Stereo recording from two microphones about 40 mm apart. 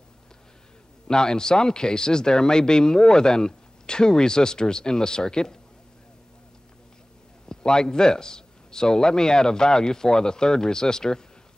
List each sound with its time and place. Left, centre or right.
1.0 s speech: centre
7.4 s a man's voice: centre